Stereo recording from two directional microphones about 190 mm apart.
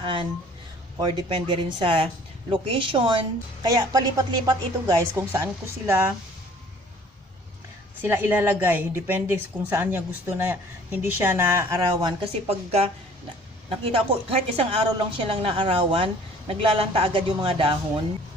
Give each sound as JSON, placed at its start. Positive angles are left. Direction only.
{"t": 0.0, "sound": "a woman's voice", "side_deg": -25}
{"t": 8.0, "sound": "a woman's voice", "side_deg": -10}